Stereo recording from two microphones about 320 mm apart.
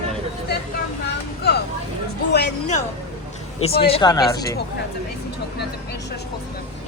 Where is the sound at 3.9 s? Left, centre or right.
Centre.